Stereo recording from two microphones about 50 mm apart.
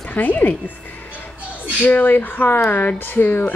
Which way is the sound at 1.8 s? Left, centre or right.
Left.